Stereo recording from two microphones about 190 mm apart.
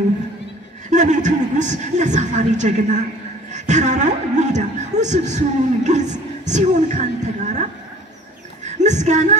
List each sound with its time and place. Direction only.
0.8 s a woman's voice: 40° right (ahead or behind)
8.6 s a woman's voice: 35° right (ahead or behind)